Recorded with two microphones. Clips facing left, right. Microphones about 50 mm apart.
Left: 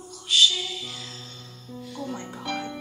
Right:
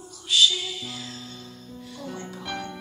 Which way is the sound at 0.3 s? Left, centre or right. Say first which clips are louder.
Even; left.